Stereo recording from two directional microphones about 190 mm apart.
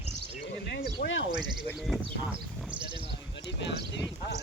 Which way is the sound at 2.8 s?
25° right (ahead or behind).